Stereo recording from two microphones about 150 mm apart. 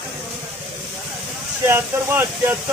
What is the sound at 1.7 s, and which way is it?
Speech, 15° right (ahead or behind).